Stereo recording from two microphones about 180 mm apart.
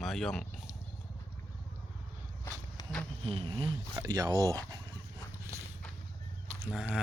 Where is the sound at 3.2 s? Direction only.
30° right (ahead or behind).